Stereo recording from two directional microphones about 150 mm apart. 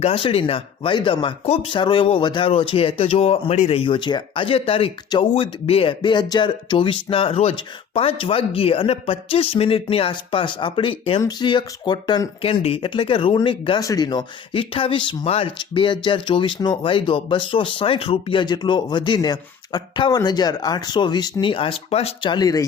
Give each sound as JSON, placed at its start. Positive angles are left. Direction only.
{"t": 0.0, "sound": "speech", "side_deg": 40}
{"t": 5.3, "sound": "speech", "side_deg": 40}